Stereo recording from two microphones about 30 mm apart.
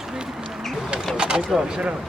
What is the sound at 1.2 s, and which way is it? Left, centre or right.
Speech, right.